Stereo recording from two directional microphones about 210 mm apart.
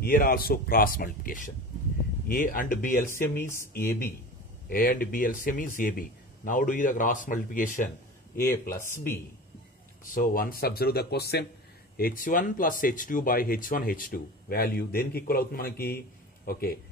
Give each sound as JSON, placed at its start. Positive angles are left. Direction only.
{"t": 0.0, "sound": "speech", "side_deg": 45}
{"t": 3.1, "sound": "speech", "side_deg": 10}
{"t": 4.6, "sound": "speech", "side_deg": 45}
{"t": 8.9, "sound": "speech", "side_deg": 10}
{"t": 10.0, "sound": "speech", "side_deg": 40}